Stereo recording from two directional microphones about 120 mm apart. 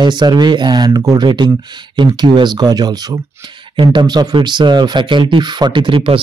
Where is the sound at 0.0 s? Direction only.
40° right (ahead or behind).